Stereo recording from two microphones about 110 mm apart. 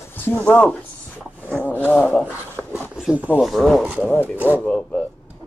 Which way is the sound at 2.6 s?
20° right (ahead or behind).